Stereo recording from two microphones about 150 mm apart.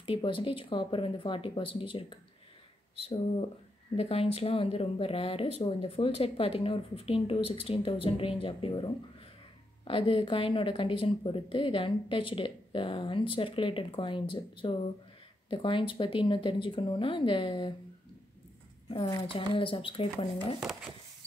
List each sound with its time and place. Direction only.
0.0 s speech: 35° left (ahead or behind)
3.9 s speech: 40° left (ahead or behind)
18.9 s speech: 30° left (ahead or behind)